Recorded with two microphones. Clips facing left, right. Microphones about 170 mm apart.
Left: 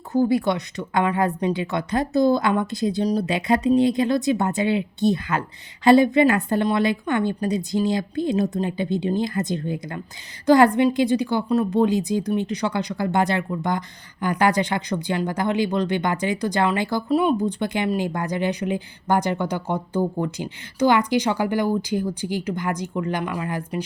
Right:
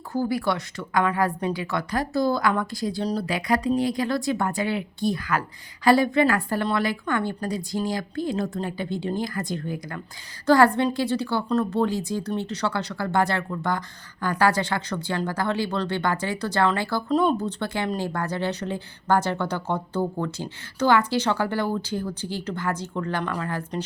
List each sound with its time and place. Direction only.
0.1 s a woman's voice: 20° left (ahead or behind)